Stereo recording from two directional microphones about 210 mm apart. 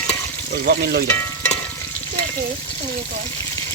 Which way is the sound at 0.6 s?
45° right (ahead or behind).